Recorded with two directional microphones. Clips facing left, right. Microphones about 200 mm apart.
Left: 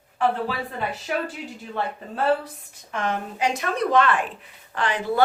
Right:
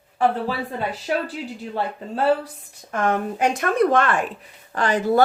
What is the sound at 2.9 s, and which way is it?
Speech, 50° right (ahead or behind).